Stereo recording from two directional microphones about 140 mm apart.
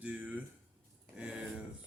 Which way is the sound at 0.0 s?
10° right (ahead or behind).